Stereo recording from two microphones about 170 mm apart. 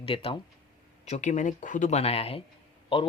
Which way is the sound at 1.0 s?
45° left (ahead or behind).